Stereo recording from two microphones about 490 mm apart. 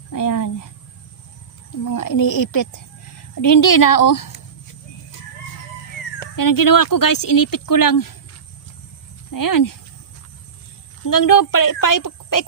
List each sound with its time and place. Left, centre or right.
0.1 s a sound: left
1.8 s speech: left
6.3 s speech: left
9.3 s speech: left
11.1 s speech: left